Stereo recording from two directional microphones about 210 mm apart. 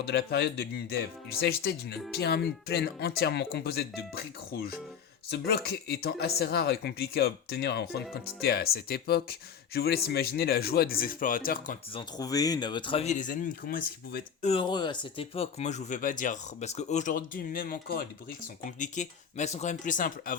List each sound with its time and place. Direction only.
0.1 s speech: 50° left (ahead or behind)
11.9 s speech: 20° left (ahead or behind); by 14.5 s 45° left (ahead or behind)
14.5 s speech: 20° left (ahead or behind); by 20.3 s 40° left (ahead or behind)